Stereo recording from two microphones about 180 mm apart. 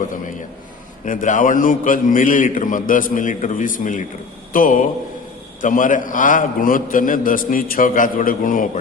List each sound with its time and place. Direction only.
1.0 s a man's voice: 45° left (ahead or behind)